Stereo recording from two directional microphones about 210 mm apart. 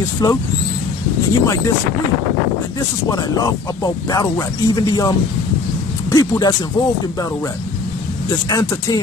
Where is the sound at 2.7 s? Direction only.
15° left (ahead or behind).